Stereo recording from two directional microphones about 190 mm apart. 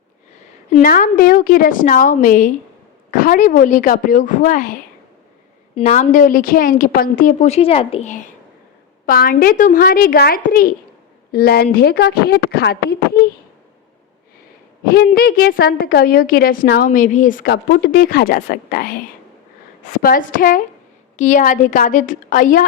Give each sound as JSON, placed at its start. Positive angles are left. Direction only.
{"t": 0.7, "sound": "a woman's voice", "side_deg": 45}
{"t": 14.8, "sound": "speech", "side_deg": 55}
{"t": 16.9, "sound": "speech", "side_deg": 40}